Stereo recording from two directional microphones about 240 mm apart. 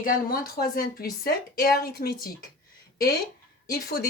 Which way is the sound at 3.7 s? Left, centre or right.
Left.